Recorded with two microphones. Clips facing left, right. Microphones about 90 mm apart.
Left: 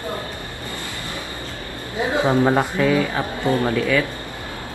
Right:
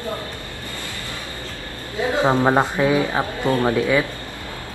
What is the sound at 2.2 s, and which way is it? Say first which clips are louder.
Speech: right 1 dB; 20° right (ahead or behind).